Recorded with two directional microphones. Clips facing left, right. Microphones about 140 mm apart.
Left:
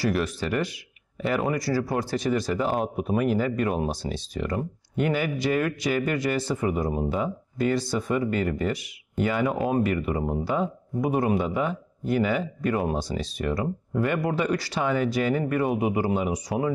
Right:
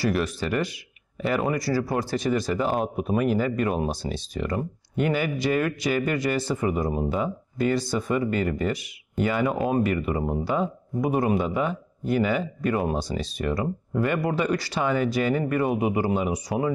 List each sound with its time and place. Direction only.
0.0 s speech: 20° right (ahead or behind)